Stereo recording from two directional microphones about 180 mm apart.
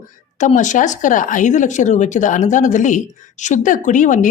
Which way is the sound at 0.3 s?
45° left (ahead or behind).